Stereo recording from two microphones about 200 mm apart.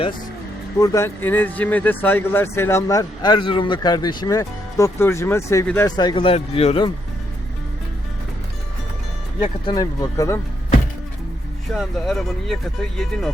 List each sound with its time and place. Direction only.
0.8 s speech: 15° left (ahead or behind); by 6.9 s 30° left (ahead or behind)
9.4 s speech: 25° left (ahead or behind)
11.7 s speech: centre (ahead or behind)